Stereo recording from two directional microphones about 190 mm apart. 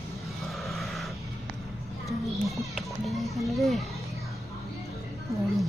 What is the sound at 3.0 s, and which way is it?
Music, centre (ahead or behind).